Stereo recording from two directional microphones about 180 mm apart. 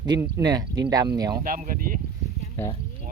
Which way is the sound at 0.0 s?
20° right (ahead or behind).